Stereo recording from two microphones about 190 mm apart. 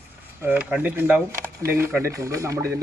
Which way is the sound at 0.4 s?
10° right (ahead or behind).